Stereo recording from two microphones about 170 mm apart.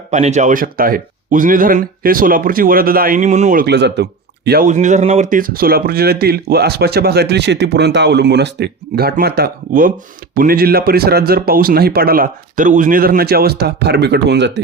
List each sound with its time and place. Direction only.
0.1 s speech: 45° right (ahead or behind); by 4.6 s 75° right (ahead or behind)
4.6 s speech: 45° right (ahead or behind); by 14.6 s 90° right